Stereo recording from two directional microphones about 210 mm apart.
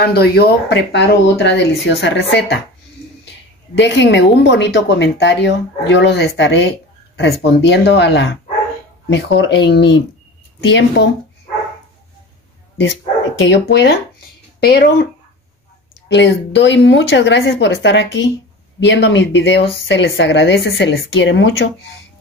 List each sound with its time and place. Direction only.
0.0 s a woman's voice: 50° left (ahead or behind)
3.7 s a woman's voice: 55° left (ahead or behind)
13.4 s a woman's voice: 55° left (ahead or behind)
16.1 s a woman's voice: 55° left (ahead or behind)